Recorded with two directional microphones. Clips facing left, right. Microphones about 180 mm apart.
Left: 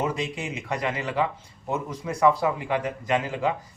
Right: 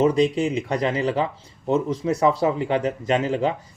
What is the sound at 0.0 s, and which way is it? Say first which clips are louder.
Speech: right 10 dB; 35° right (ahead or behind).